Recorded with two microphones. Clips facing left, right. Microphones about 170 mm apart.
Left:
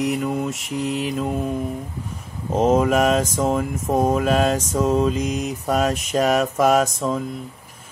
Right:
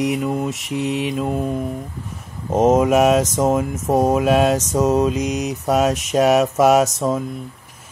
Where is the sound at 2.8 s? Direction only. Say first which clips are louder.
Right 3 dB; 5° right (ahead or behind).